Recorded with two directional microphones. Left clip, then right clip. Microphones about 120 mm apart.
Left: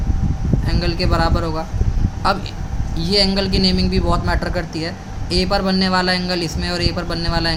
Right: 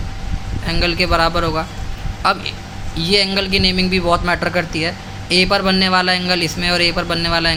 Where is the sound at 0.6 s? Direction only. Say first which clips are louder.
Right 7 dB; 20° right (ahead or behind).